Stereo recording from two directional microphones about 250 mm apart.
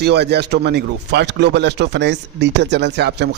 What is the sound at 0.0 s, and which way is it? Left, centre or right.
A man's voice, right.